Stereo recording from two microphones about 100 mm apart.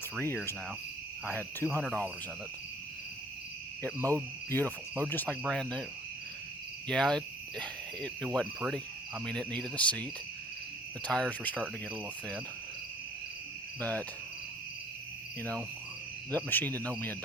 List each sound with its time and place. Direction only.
0.2 s cricket: 20° left (ahead or behind)
1.8 s speech: 5° left (ahead or behind)
3.9 s hoot: 30° right (ahead or behind)
4.4 s cricket: 15° left (ahead or behind)
5.5 s speech: 5° left (ahead or behind)
6.8 s cricket: 10° left (ahead or behind)
9.2 s speech: 10° left (ahead or behind)
13.7 s cricket: 15° left (ahead or behind)
16.3 s speech: 20° left (ahead or behind)